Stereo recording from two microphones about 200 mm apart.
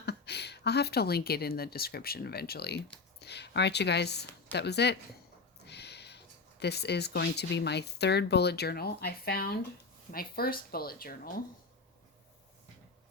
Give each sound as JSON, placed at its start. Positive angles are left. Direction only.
{"t": 0.0, "sound": "speech", "side_deg": 55}